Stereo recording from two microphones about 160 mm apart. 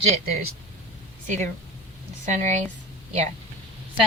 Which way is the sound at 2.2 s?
50° right (ahead or behind).